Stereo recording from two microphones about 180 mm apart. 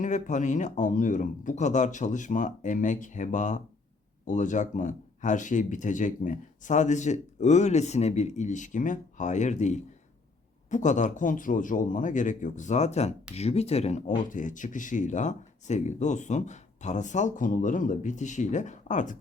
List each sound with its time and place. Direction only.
0.0 s speech: 45° left (ahead or behind)